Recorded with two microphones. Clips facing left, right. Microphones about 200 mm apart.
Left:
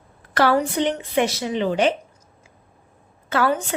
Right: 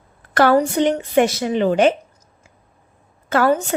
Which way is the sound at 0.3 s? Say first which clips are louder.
Right 4 dB; 45° right (ahead or behind).